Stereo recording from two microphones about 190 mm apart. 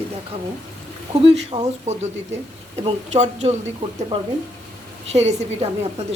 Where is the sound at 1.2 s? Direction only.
70° right (ahead or behind).